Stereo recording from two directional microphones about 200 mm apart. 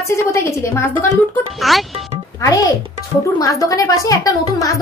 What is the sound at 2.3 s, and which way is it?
A child's voice, 15° left (ahead or behind).